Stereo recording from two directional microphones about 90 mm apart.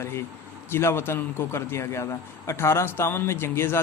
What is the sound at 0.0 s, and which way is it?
A man's voice, 30° left (ahead or behind).